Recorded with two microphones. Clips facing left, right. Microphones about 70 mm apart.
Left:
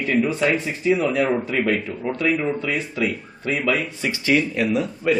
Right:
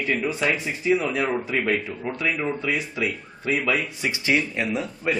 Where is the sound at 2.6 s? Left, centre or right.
Centre.